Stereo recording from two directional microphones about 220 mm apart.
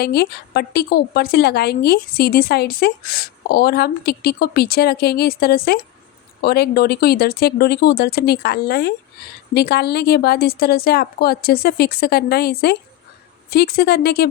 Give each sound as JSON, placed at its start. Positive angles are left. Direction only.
{"t": 0.0, "sound": "a woman's voice", "side_deg": 45}